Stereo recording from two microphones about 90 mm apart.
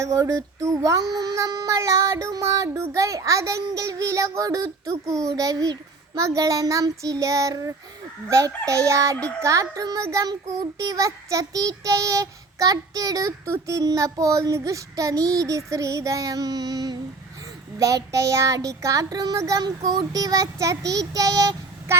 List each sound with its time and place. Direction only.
0.0 s child singing: 35° right (ahead or behind)
17.7 s child singing: 40° right (ahead or behind)
19.6 s child singing: 55° right (ahead or behind)